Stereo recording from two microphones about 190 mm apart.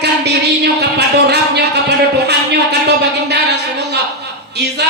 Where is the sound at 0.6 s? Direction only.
60° right (ahead or behind).